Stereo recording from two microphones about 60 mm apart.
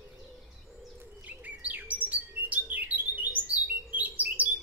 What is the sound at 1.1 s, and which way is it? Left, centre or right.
Bird, right.